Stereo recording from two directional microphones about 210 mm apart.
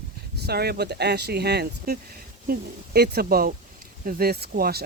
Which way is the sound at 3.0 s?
45° right (ahead or behind).